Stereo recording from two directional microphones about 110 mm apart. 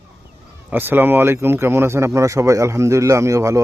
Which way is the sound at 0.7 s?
20° right (ahead or behind).